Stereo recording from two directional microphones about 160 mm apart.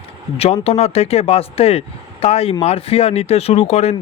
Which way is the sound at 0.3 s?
40° left (ahead or behind).